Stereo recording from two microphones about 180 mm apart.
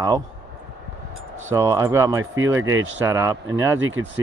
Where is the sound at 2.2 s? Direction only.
90° right.